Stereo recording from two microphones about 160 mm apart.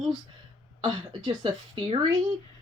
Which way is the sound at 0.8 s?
25° right (ahead or behind).